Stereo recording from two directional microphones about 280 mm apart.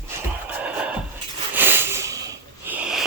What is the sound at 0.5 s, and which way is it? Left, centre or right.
Music, centre.